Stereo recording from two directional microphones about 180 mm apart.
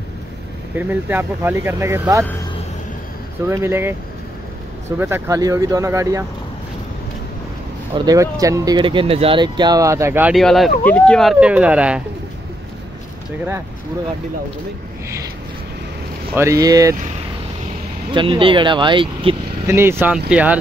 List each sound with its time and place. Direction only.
0.7 s speech: 10° right (ahead or behind)
3.4 s speech: 15° right (ahead or behind)
7.9 s speech: 20° right (ahead or behind)
10.3 s speech: centre (ahead or behind)
16.3 s speech: 20° right (ahead or behind)
18.1 s speech: 30° right (ahead or behind)
19.7 s speech: 15° right (ahead or behind)